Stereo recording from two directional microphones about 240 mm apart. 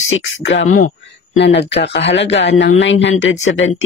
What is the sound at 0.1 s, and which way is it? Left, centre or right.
Speech, left.